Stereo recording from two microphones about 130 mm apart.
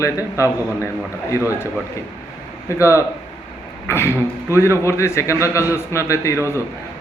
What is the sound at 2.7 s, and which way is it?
A man's voice, 20° left (ahead or behind).